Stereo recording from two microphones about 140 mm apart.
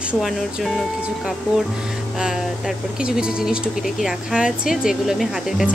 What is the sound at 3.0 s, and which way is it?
Speech, 5° right (ahead or behind).